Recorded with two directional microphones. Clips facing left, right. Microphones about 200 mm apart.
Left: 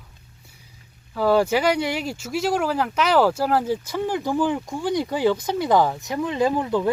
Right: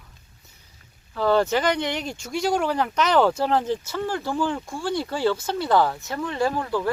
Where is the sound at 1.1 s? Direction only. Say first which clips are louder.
Left 2 dB; 10° left (ahead or behind).